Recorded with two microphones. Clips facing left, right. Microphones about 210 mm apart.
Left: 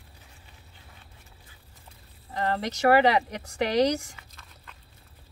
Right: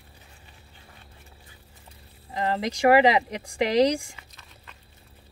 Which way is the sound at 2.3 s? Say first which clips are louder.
Right 2 dB; 10° right (ahead or behind).